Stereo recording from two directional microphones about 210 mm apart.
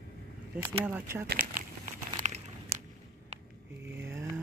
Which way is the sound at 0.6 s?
10° right (ahead or behind).